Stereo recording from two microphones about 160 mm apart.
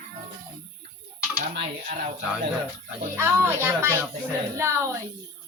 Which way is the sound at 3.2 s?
15° right (ahead or behind).